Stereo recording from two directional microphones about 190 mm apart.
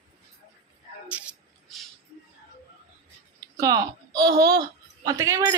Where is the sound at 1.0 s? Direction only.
5° right (ahead or behind).